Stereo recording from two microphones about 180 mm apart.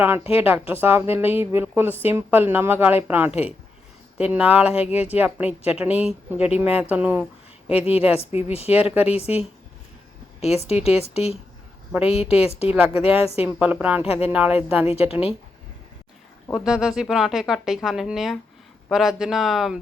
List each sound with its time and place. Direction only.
0.3 s a woman's voice: 10° right (ahead or behind)
7.7 s a woman's voice: 35° left (ahead or behind)
8.7 s a woman's voice: 10° right (ahead or behind)
9.1 s a woman's voice: 35° left (ahead or behind)
10.7 s a woman's voice: 35° left (ahead or behind)
11.9 s a woman's voice: 5° right (ahead or behind)
12.1 s a woman's voice: 35° left (ahead or behind)
13.4 s a woman's voice: 10° right (ahead or behind)
16.5 s speech: centre (ahead or behind)